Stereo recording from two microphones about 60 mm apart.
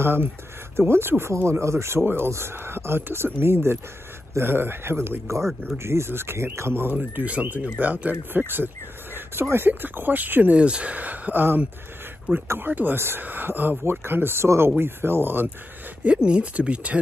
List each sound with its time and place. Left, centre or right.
0.0 s speech: right
6.9 s speech: right
16.0 s speech: centre